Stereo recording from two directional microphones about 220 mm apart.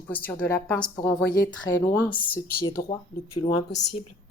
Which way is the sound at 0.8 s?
20° left (ahead or behind).